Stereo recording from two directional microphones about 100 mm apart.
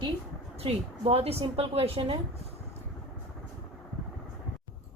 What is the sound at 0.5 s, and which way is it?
A woman's voice, 85° right.